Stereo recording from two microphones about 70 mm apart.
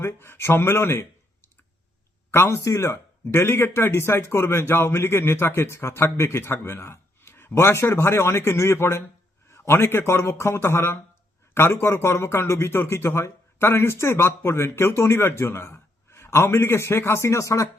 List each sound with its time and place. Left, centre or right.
0.0 s speech: left
2.3 s speech: left
2.6 s speech: left
2.9 s speech: left